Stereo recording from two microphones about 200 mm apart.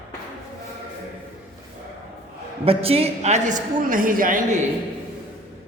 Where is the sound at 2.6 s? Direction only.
30° right (ahead or behind).